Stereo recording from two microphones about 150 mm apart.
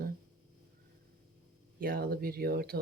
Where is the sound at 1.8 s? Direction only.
80° right.